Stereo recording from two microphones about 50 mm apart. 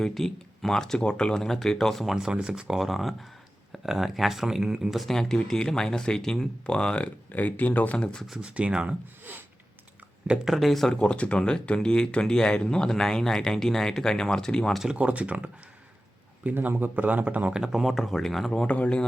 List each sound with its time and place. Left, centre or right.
0.0 s speech: centre
2.0 s speech: centre
5.0 s speech: centre
7.3 s speech: left
7.9 s speech: centre
8.4 s speech: right
10.2 s speech: centre
10.5 s speech: centre
10.9 s speech: left
14.9 s speech: right
16.6 s a man's voice: right
17.5 s speech: centre
17.8 s speech: centre
18.7 s speech: left